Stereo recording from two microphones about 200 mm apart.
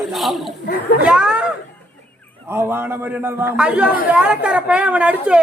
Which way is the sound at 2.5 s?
10° right (ahead or behind).